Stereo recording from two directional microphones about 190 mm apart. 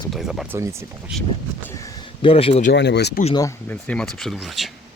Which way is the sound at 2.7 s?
65° left (ahead or behind).